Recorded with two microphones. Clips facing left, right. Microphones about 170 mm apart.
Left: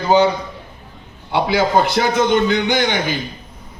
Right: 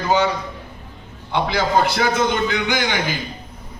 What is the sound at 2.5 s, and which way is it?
Speech, 25° left (ahead or behind).